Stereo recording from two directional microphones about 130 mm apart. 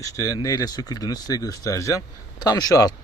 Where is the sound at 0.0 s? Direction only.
25° left (ahead or behind).